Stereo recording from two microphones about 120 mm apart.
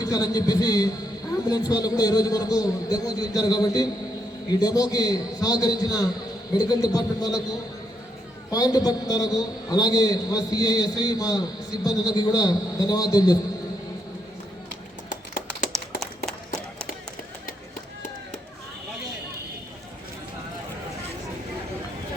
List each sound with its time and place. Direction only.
0.0 s a man's voice: 30° left (ahead or behind)
8.4 s a man's voice: 30° left (ahead or behind)
15.1 s typing: 90° left
15.7 s a sound: centre (ahead or behind)